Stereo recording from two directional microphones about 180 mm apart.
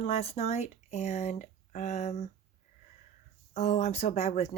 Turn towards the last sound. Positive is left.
turn(degrees=35)  # may be behind; listen again after turning